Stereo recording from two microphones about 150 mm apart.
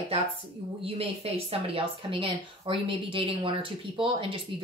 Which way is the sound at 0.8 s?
40° right (ahead or behind).